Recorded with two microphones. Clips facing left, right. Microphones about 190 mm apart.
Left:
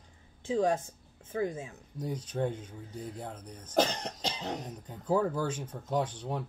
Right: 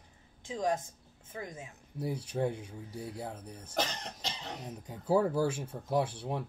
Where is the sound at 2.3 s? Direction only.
10° right (ahead or behind).